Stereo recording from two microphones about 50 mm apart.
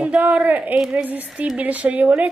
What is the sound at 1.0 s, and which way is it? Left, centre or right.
Speech, right.